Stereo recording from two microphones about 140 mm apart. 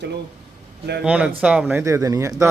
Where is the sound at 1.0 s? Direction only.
5° right (ahead or behind); by 2.4 s 25° right (ahead or behind).